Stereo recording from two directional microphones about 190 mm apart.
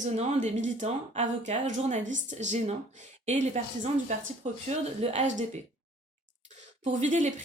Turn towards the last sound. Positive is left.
turn(degrees=-40)  # may be behind; listen again after turning